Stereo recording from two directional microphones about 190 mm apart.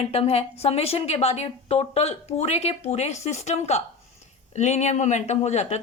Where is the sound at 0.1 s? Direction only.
30° left (ahead or behind).